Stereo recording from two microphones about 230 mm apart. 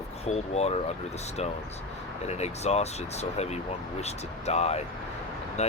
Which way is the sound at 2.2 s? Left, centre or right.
Left.